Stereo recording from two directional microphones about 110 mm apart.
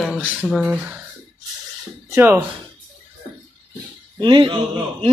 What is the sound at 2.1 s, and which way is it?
Speech, 15° right (ahead or behind).